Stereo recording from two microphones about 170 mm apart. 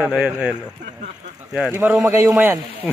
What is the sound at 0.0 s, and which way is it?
Speech, 5° right (ahead or behind).